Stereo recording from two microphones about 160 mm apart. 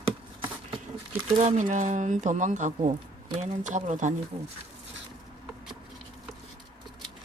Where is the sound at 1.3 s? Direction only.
45° right (ahead or behind).